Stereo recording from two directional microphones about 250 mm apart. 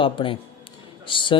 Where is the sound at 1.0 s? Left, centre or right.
Centre.